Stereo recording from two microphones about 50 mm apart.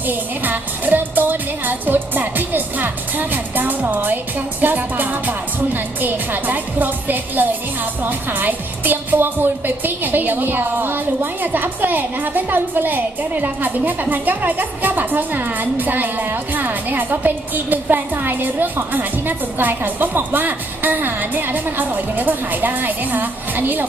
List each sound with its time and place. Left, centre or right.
0.1 s music: right
4.6 s a woman's voice: right